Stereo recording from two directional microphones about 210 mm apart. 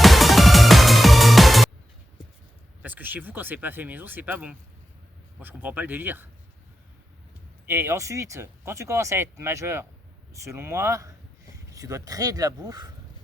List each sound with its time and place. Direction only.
0.0 s music: centre (ahead or behind)
2.8 s speech: 10° right (ahead or behind)
7.7 s speech: 10° right (ahead or behind)